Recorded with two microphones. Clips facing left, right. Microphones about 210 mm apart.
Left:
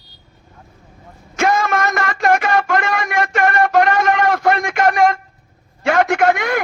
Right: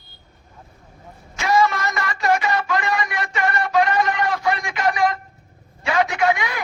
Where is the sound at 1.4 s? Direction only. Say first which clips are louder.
Left 2 dB; 50° left (ahead or behind).